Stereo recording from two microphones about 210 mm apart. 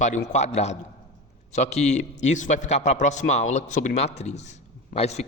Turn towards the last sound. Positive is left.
turn(degrees=30)  # may be behind; listen again after turning